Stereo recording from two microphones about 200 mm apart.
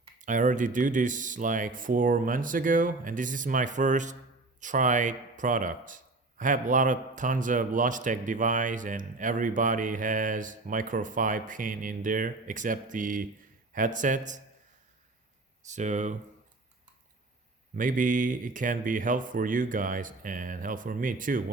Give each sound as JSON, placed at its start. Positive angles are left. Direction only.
{"t": 0.2, "sound": "a man's voice", "side_deg": -40}
{"t": 15.6, "sound": "a man's voice", "side_deg": -35}
{"t": 17.7, "sound": "a man's voice", "side_deg": -40}